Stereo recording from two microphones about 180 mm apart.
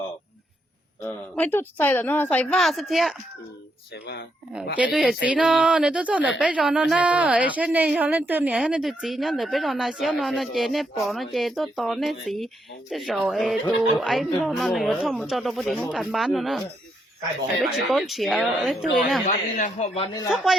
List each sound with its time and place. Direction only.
1.0 s speech: 10° left (ahead or behind)
3.9 s speech: 65° left (ahead or behind)
4.8 s a woman's voice: 5° right (ahead or behind)
19.3 s speech: 45° left (ahead or behind)
20.3 s a woman's voice: centre (ahead or behind)